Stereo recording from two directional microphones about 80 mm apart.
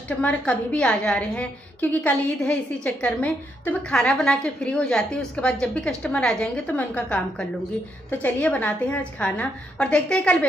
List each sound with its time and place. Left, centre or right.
0.2 s a woman's voice: centre
6.8 s a woman's voice: left